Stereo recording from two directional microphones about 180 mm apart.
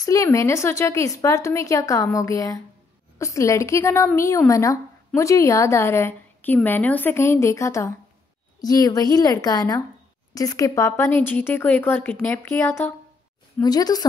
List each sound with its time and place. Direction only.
0.0 s a woman's voice: 20° left (ahead or behind)
13.6 s a woman's voice: 20° left (ahead or behind)